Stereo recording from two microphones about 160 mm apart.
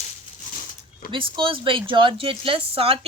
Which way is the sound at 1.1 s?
30° right (ahead or behind).